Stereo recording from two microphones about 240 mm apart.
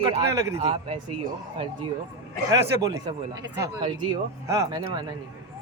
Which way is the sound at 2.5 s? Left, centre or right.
Centre.